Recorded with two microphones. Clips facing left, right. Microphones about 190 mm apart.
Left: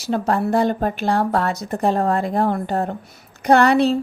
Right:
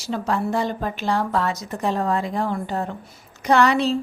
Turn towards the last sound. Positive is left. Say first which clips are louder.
# left 4 dB
turn(degrees=60)  # may be behind; listen again after turning